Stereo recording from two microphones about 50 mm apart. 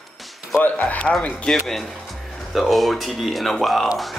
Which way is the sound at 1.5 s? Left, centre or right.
Centre.